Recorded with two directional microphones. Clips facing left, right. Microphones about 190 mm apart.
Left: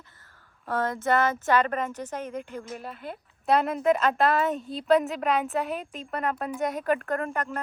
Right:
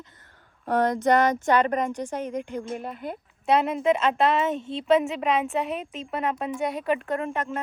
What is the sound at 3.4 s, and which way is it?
A woman's voice, centre (ahead or behind).